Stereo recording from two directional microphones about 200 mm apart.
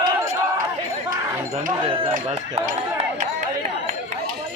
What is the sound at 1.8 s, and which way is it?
Speech, 25° right (ahead or behind).